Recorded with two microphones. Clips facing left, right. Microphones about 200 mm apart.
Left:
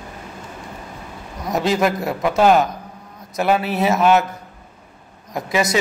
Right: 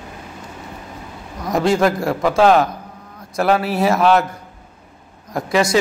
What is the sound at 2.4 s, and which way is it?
A man's voice, centre (ahead or behind).